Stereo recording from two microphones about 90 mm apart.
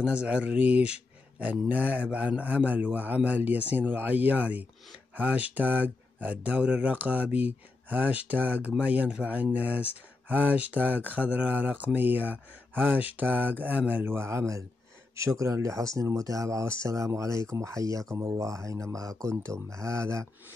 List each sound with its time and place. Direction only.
0.0 s speech: 10° right (ahead or behind); by 20.2 s 35° right (ahead or behind)